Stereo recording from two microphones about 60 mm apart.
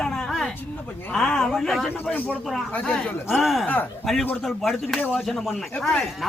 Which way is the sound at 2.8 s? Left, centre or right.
Centre.